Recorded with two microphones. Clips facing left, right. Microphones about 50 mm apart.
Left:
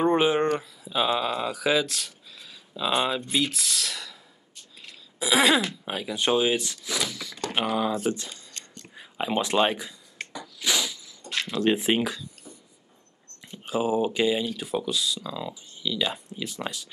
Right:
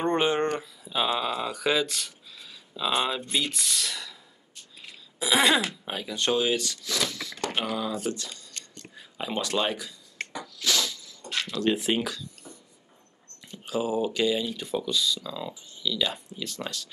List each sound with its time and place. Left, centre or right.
0.0 s speech: centre
5.2 s speech: centre
6.0 s speech: centre
8.1 s a sound: left
10.6 s a sound: centre
11.4 s speech: left
13.5 s speech: left
14.9 s speech: centre
15.8 s speech: centre